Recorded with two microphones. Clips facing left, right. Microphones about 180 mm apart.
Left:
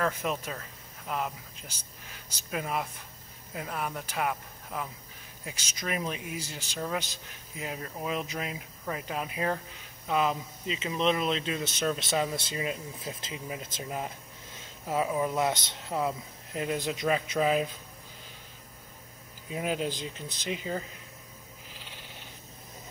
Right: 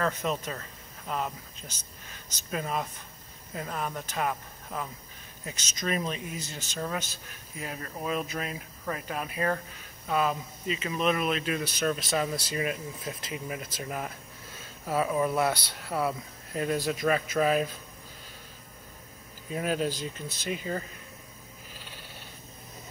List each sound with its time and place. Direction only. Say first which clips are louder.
0.0 s speech: right 1 dB; 10° left (ahead or behind)
19.5 s speech: right 2 dB; 15° left (ahead or behind)
21.7 s cat: right 1 dB; 15° left (ahead or behind)